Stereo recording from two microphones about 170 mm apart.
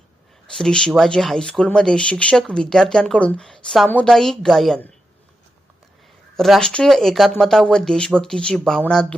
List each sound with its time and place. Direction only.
0.4 s speech: 5° left (ahead or behind)
6.3 s speech: centre (ahead or behind)